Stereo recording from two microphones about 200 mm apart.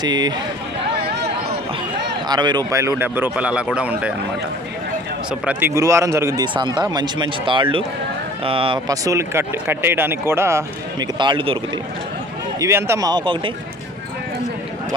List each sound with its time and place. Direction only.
0.0 s speech: 20° right (ahead or behind)
2.2 s speech: 20° right (ahead or behind); by 4.1 s 5° right (ahead or behind)
5.3 s speech: 10° right (ahead or behind)
11.0 s speech: 25° right (ahead or behind)
12.5 s speech: 15° right (ahead or behind)